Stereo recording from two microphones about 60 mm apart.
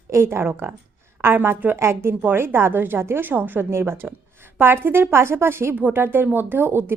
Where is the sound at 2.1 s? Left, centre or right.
Right.